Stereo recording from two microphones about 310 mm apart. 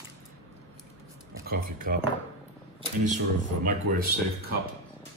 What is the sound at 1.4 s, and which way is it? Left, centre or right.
Speech, right.